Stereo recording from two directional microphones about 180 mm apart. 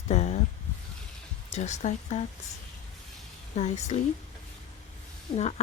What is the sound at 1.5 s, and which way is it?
Speech, 40° left (ahead or behind).